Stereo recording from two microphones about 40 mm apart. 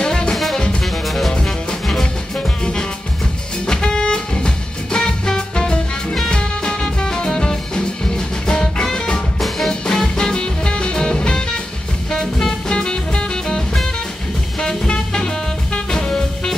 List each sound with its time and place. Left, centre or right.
0.0 s music: centre
1.0 s music: centre
1.3 s music: left
3.6 s music: centre
14.6 s music: centre